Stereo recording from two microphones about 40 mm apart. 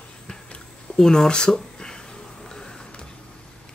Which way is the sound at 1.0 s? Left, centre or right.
Centre.